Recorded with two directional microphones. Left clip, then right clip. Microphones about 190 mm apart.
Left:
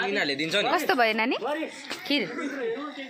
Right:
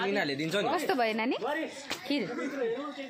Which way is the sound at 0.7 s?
Centre (ahead or behind).